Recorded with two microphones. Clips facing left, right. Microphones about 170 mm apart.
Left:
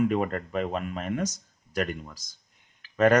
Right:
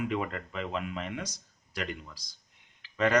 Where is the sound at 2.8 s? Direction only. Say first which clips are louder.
Left 6 dB; 50° left (ahead or behind).